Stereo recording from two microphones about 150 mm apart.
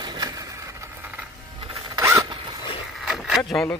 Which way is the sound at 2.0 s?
20° right (ahead or behind).